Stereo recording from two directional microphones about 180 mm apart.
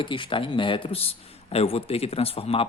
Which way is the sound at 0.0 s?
25° left (ahead or behind).